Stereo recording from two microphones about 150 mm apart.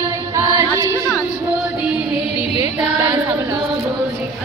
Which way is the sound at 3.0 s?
10° right (ahead or behind).